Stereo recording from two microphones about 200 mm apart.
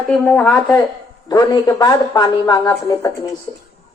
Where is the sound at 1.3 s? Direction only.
20° left (ahead or behind).